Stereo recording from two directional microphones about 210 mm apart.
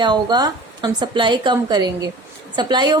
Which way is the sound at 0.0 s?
20° right (ahead or behind).